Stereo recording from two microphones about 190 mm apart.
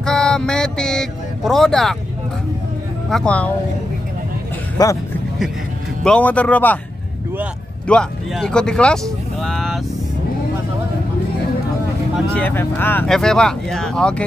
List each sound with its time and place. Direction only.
0.0 s speech: 5° left (ahead or behind)
3.1 s speech: 5° left (ahead or behind)
4.8 s speech: 20° left (ahead or behind)
6.0 s speech: 5° left (ahead or behind)
7.9 s speech: 5° left (ahead or behind)
12.4 s speech: 10° left (ahead or behind)